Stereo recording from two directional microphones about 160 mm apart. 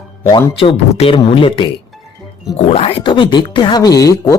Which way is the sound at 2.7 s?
40° left (ahead or behind).